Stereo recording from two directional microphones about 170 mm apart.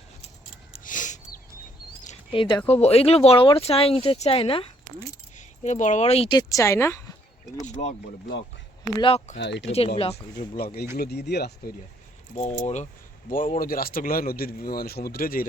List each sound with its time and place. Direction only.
0.9 s a sound: 50° left (ahead or behind)
2.3 s speech: 30° left (ahead or behind)
5.4 s speech: 45° left (ahead or behind)
6.3 s speech: 20° left (ahead or behind)
7.6 s speech: 45° left (ahead or behind)
9.0 s speech: 30° left (ahead or behind)
9.4 s speech: 90° left
9.6 s speech: 35° left (ahead or behind)
10.9 s speech: 70° left (ahead or behind)
12.6 s speech: 40° left (ahead or behind)
13.3 s speech: 55° left (ahead or behind)